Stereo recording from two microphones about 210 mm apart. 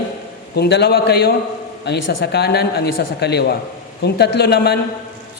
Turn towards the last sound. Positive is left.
turn(degrees=50)  # may be behind; listen again after turning